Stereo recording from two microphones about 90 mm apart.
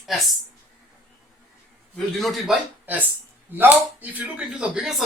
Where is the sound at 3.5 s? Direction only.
20° right (ahead or behind); by 5.0 s 5° right (ahead or behind).